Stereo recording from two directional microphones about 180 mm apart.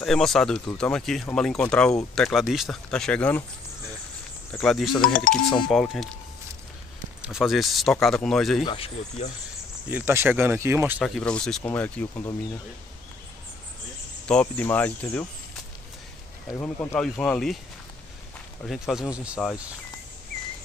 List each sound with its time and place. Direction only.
0.0 s speech: centre (ahead or behind)
4.5 s speech: 5° left (ahead or behind)
5.0 s speech: 50° left (ahead or behind)
5.7 s speech: centre (ahead or behind)
7.2 s speech: centre (ahead or behind)
8.6 s speech: 30° left (ahead or behind)
9.8 s speech: 10° right (ahead or behind)
11.0 s speech: 5° left (ahead or behind)
14.2 s speech: 5° left (ahead or behind)
16.5 s speech: 10° left (ahead or behind)
18.7 s speech: centre (ahead or behind)